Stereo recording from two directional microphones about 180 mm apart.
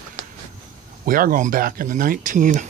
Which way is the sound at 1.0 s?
50° right (ahead or behind).